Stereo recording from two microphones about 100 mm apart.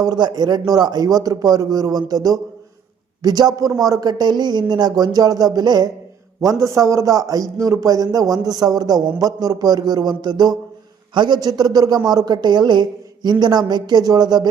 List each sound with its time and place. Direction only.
0.0 s a man's voice: 40° right (ahead or behind)